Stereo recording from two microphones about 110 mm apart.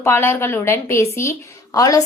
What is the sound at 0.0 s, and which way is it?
A woman's voice, 25° left (ahead or behind).